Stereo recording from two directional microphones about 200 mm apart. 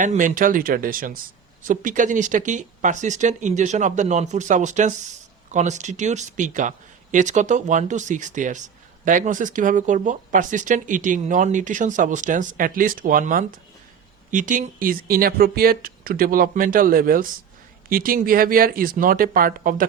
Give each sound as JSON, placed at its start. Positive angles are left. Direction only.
{"t": 0.0, "sound": "speech", "side_deg": -40}